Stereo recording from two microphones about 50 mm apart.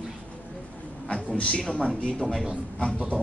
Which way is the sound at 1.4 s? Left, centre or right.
Left.